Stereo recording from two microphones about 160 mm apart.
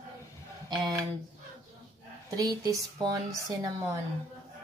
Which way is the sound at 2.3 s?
25° right (ahead or behind).